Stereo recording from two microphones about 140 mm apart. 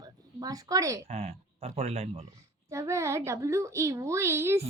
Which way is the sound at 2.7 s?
20° right (ahead or behind).